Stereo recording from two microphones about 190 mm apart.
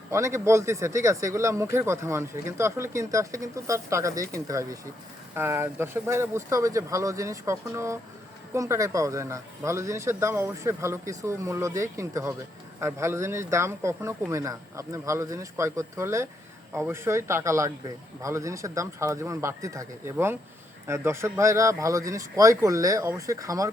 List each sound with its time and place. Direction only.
0.1 s speech: 15° right (ahead or behind)